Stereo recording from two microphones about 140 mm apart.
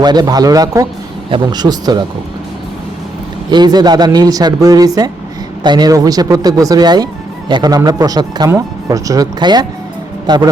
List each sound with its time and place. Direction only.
0.0 s speech: 30° right (ahead or behind)
3.5 s speech: 30° right (ahead or behind)